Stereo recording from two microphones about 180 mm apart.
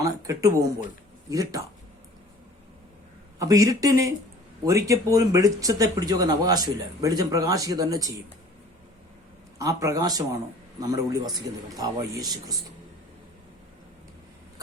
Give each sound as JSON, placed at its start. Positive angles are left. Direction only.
{"t": 0.0, "sound": "speech", "side_deg": -20}
{"t": 3.3, "sound": "speech", "side_deg": -20}
{"t": 9.6, "sound": "speech", "side_deg": -20}